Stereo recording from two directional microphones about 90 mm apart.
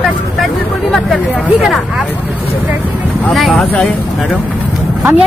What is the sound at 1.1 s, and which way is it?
Speech, centre (ahead or behind).